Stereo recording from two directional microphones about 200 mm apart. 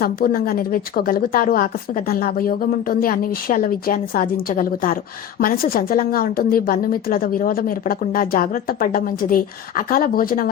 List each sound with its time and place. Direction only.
0.0 s a woman's voice: 45° left (ahead or behind)